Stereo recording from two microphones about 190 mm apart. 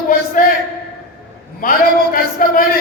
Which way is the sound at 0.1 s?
45° left (ahead or behind).